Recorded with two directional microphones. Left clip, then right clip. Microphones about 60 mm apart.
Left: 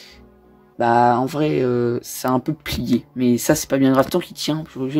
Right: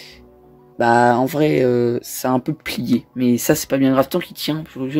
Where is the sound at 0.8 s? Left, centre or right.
Right.